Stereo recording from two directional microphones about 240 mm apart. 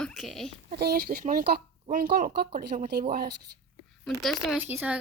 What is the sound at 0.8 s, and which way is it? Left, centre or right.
Speech, right.